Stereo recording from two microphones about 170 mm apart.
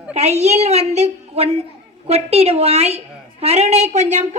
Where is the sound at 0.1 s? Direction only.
40° right (ahead or behind).